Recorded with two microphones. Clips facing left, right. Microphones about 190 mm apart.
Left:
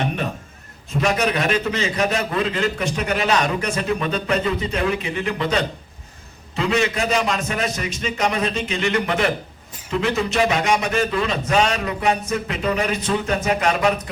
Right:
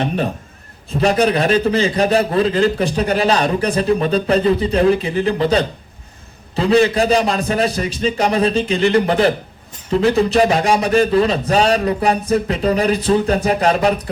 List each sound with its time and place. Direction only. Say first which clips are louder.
0.9 s a man's voice: right 5 dB; 35° right (ahead or behind)